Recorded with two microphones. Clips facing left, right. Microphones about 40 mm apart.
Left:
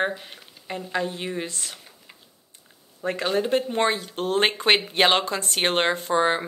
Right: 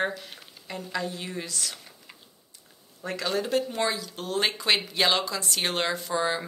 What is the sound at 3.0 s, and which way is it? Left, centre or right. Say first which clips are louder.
Speech: left 5 dB; left.